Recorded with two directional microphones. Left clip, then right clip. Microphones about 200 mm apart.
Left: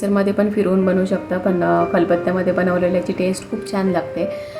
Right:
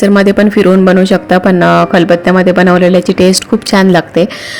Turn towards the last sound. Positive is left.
turn(degrees=-45)  # may be behind; listen again after turning